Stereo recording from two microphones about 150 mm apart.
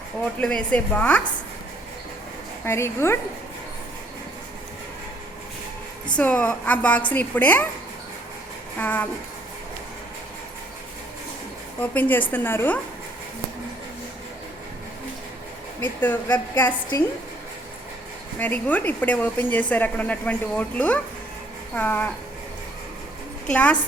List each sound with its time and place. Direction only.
0.3 s a woman's voice: 5° left (ahead or behind)
2.6 s a woman's voice: 15° left (ahead or behind)
6.1 s a woman's voice: 10° left (ahead or behind)
8.8 s a woman's voice: 10° left (ahead or behind)
11.8 s a woman's voice: 10° left (ahead or behind)
15.8 s a woman's voice: 10° left (ahead or behind)
18.3 s a woman's voice: 10° left (ahead or behind)
23.5 s a woman's voice: 10° left (ahead or behind)